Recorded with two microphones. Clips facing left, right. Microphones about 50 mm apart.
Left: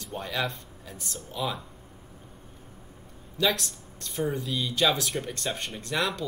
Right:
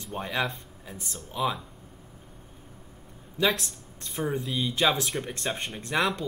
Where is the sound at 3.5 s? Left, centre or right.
Centre.